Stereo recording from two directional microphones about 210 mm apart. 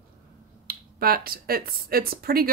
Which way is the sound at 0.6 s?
45° right (ahead or behind).